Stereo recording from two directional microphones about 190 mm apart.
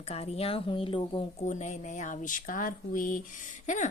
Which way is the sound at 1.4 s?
40° left (ahead or behind).